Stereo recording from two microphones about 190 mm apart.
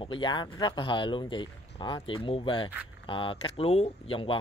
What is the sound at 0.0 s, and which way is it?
Speech, 25° left (ahead or behind).